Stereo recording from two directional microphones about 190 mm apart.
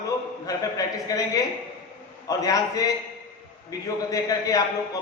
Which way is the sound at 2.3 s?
20° left (ahead or behind).